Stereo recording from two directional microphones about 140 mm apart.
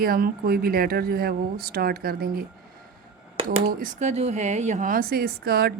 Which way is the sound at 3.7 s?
75° right (ahead or behind).